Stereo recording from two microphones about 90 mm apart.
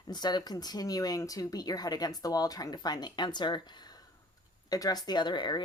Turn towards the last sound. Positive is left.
turn(degrees=55)  # may be behind; listen again after turning